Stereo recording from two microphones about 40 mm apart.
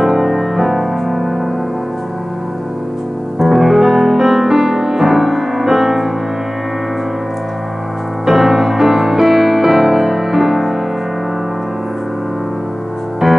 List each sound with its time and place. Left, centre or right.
0.0 s music: centre
3.3 s music: centre
8.3 s music: centre
13.2 s music: centre